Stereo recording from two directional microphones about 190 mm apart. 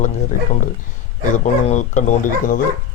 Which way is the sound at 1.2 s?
40° left (ahead or behind).